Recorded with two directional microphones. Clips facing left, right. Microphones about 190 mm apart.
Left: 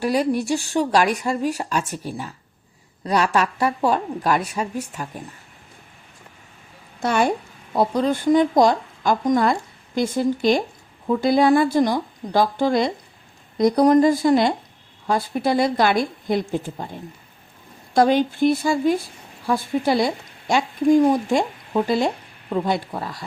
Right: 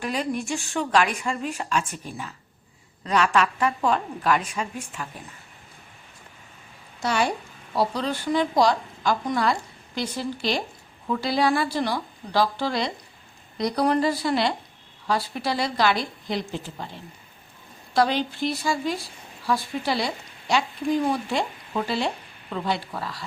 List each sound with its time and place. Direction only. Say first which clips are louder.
0.0 s a woman's voice: left 7 dB; 35° left (ahead or behind)
7.0 s a woman's voice: left 4 dB; 50° left (ahead or behind)